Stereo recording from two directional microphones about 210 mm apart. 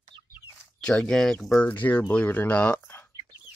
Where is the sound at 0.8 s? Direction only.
5° left (ahead or behind).